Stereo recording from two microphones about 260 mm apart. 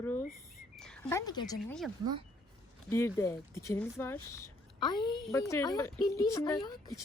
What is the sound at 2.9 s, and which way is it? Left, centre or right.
A woman's voice, centre.